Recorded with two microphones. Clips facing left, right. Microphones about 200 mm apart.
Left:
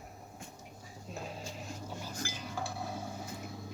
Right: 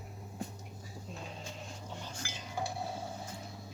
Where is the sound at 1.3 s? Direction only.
5° left (ahead or behind).